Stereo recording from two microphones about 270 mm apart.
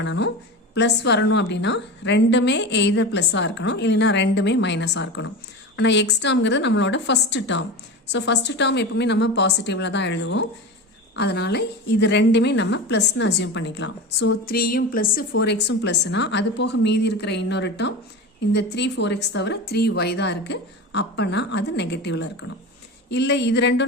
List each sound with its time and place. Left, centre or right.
0.0 s a woman's voice: left